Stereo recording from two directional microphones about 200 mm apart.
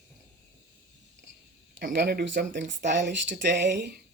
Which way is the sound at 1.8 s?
55° right (ahead or behind).